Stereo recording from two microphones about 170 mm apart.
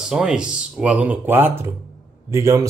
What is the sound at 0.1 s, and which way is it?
Speech, 5° right (ahead or behind).